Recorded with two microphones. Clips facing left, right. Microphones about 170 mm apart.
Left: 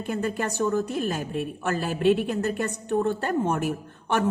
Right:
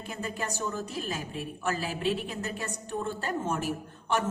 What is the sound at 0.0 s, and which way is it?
A woman's voice, 60° left (ahead or behind).